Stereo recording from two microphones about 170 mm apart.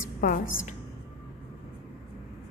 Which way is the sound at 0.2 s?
50° left (ahead or behind).